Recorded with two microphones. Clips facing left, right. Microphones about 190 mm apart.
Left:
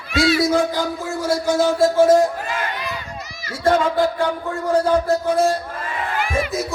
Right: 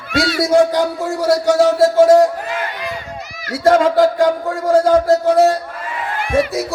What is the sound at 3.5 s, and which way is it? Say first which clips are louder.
A man's voice: right 5 dB; 90° right.